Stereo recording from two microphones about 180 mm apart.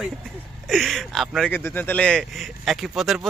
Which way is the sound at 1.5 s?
10° left (ahead or behind).